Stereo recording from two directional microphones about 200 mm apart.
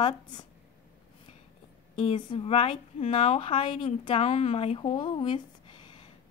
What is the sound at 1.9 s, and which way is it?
A woman's voice, 25° left (ahead or behind).